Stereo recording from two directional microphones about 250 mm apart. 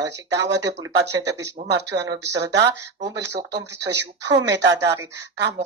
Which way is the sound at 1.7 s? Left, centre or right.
Right.